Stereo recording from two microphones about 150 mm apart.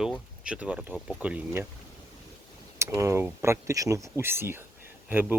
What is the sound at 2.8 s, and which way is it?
Speech, 20° right (ahead or behind).